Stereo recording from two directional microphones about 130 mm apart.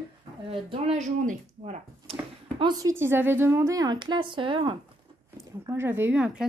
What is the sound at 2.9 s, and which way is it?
A woman's voice, 15° right (ahead or behind).